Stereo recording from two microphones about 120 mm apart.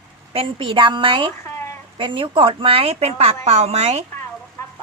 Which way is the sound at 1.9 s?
45° right (ahead or behind).